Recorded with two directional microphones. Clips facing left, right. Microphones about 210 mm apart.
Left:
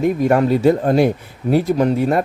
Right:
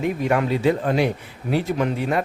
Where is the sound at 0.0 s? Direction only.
40° left (ahead or behind).